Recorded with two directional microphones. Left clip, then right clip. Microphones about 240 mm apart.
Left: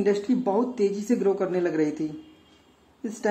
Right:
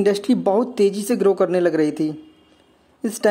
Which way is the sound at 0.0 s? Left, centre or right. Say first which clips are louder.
Right 6 dB; right.